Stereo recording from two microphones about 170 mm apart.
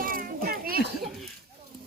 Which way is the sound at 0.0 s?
55° right (ahead or behind).